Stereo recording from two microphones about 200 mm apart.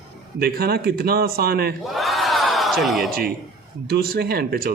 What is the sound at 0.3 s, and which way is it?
Speech, 50° right (ahead or behind).